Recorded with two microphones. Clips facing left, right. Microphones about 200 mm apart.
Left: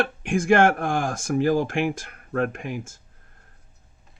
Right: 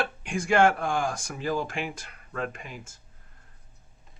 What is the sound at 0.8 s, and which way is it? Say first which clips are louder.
Speech: left 3 dB; 55° left (ahead or behind).